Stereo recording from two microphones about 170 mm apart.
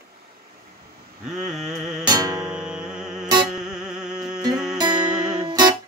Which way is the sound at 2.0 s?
20° right (ahead or behind).